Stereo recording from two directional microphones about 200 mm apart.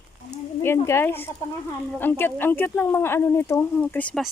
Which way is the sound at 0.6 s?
10° left (ahead or behind).